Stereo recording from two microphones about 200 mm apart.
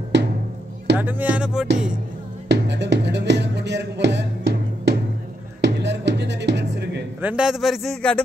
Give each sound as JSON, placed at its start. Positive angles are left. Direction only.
{"t": 0.1, "sound": "music", "side_deg": -60}
{"t": 0.9, "sound": "speech", "side_deg": -10}
{"t": 2.4, "sound": "music", "side_deg": -60}
{"t": 7.2, "sound": "a man's voice", "side_deg": -5}